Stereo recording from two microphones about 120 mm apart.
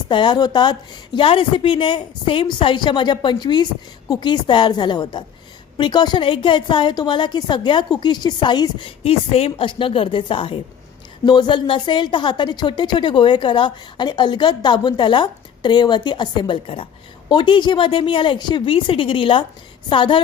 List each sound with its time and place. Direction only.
0.1 s a woman's voice: 40° left (ahead or behind)
9.0 s a woman's voice: 55° left (ahead or behind)